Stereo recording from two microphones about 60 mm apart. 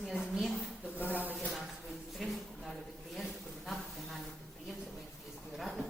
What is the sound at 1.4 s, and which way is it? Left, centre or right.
Speech, centre.